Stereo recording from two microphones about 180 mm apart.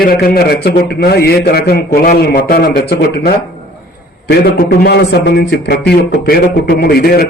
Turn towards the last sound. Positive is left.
turn(degrees=60)  # may be behind; listen again after turning